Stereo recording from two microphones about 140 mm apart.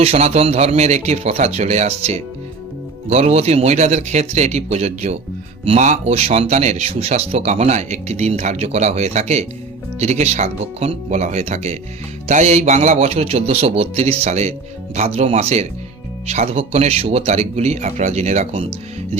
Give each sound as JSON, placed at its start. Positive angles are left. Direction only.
{"t": 0.0, "sound": "speech", "side_deg": -45}